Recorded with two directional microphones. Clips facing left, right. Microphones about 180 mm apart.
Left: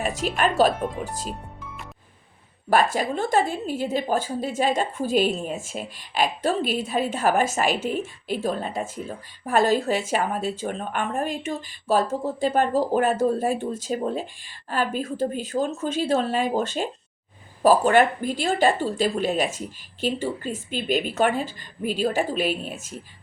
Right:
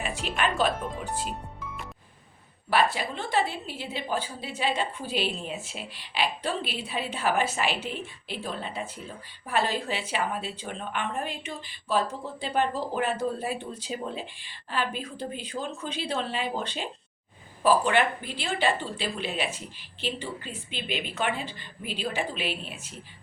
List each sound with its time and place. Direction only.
0.0 s speech: 40° left (ahead or behind)
2.9 s a woman's voice: 45° left (ahead or behind)